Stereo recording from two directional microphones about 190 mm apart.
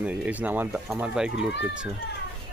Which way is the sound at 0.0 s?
5° right (ahead or behind).